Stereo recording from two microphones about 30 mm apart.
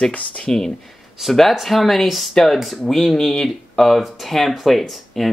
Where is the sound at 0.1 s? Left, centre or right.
Left.